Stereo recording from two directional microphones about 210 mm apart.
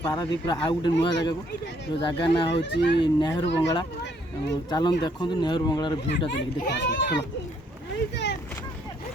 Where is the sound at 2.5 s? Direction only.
55° left (ahead or behind).